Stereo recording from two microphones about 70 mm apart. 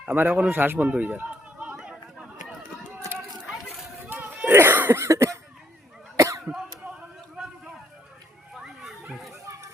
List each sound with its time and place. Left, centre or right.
0.0 s a man's voice: right
0.9 s chatter: right
4.1 s a sound: right
5.0 s cough: right
8.5 s children playing: centre